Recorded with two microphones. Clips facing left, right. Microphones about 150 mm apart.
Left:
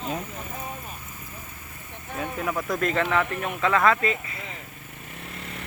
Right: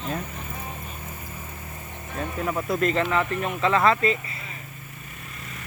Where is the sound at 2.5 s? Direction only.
5° right (ahead or behind).